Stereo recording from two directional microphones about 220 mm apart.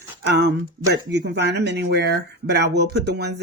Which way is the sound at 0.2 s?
50° right (ahead or behind).